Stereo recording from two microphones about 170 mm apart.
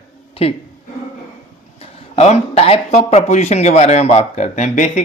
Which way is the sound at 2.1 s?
40° left (ahead or behind).